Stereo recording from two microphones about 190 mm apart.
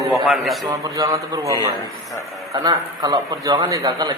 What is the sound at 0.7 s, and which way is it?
A man's voice, 20° right (ahead or behind).